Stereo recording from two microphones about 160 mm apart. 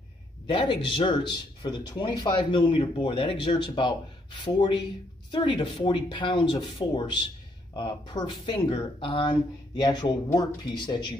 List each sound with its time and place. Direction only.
0.5 s speech: 35° left (ahead or behind)
5.3 s speech: 30° left (ahead or behind)